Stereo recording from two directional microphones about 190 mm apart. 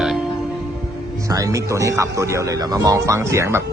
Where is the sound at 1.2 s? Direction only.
15° right (ahead or behind).